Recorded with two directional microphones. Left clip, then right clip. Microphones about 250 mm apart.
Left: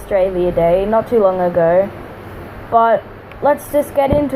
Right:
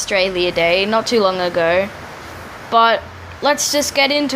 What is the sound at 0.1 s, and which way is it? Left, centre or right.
A woman's voice, right.